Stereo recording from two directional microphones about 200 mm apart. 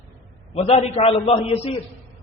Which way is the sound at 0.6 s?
30° left (ahead or behind).